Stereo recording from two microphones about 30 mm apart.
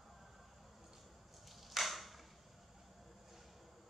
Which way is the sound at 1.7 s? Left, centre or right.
Centre.